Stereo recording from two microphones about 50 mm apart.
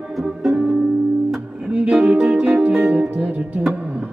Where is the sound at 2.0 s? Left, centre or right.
Right.